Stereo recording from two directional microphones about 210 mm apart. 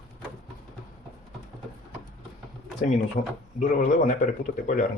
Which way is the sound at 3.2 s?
35° left (ahead or behind).